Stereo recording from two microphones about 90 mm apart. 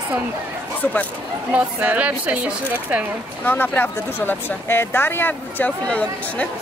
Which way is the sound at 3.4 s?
20° left (ahead or behind).